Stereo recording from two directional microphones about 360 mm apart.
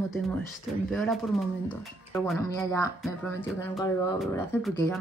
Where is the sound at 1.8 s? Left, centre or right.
Centre.